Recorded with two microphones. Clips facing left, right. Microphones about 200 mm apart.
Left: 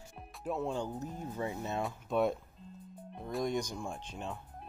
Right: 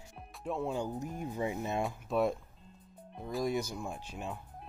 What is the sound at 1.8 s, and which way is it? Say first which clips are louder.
Speech: left 2 dB; centre (ahead or behind).